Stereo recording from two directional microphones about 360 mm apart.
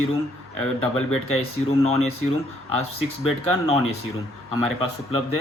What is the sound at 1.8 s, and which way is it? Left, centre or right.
Speech, centre.